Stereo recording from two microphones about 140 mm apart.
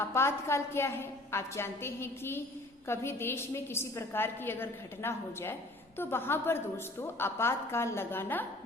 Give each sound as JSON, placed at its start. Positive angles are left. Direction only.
{"t": 0.0, "sound": "a woman's voice", "side_deg": 20}